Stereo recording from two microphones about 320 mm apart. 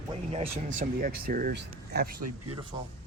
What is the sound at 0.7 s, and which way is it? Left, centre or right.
Speech, right.